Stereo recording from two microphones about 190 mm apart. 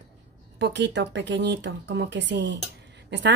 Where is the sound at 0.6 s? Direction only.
65° right (ahead or behind).